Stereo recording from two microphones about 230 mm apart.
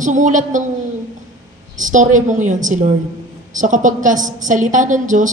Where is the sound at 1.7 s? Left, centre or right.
Right.